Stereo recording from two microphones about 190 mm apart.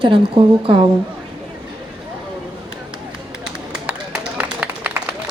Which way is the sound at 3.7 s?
5° right (ahead or behind).